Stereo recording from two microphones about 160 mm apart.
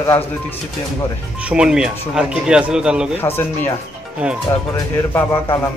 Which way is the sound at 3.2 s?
15° left (ahead or behind).